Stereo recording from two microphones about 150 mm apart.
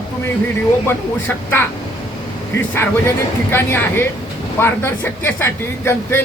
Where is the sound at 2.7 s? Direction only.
15° left (ahead or behind).